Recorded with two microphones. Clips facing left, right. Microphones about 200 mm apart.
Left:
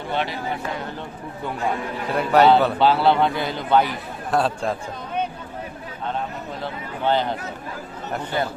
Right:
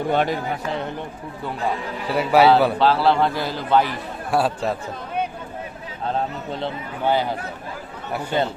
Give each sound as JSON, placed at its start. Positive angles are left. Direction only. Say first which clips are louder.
{"t": 0.1, "sound": "speech", "louder": "right 5 dB", "side_deg": -45}
{"t": 2.0, "sound": "a man's voice", "louder": "right 1 dB", "side_deg": -5}
{"t": 6.1, "sound": "a sound", "louder": "right 4 dB", "side_deg": -30}
{"t": 7.0, "sound": "speech", "louder": "even", "side_deg": -10}